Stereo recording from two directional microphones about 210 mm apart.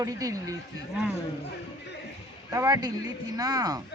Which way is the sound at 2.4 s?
15° right (ahead or behind).